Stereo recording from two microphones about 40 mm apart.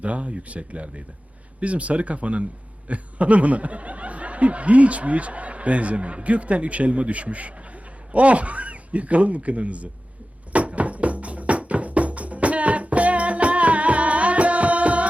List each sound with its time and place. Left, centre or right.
0.0 s a man's voice: right
10.5 s music: right